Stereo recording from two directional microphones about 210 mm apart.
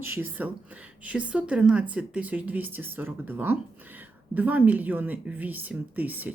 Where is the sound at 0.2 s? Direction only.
10° right (ahead or behind).